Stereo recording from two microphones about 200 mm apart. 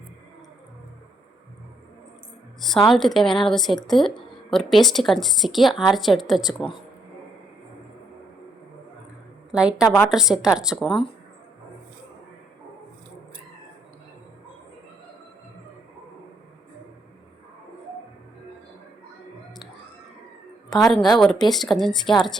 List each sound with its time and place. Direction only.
2.6 s a woman's voice: centre (ahead or behind)
9.5 s a woman's voice: 5° right (ahead or behind)
9.8 s a woman's voice: 10° left (ahead or behind)
10.1 s a woman's voice: 5° right (ahead or behind)
20.8 s a woman's voice: centre (ahead or behind)